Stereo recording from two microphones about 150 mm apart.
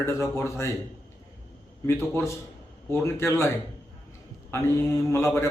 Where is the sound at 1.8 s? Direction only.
20° left (ahead or behind).